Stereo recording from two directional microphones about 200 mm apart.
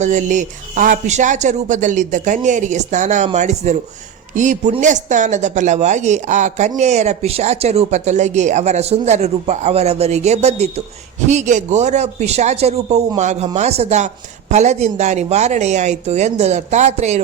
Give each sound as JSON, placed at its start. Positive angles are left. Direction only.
{"t": 0.0, "sound": "speech", "side_deg": -40}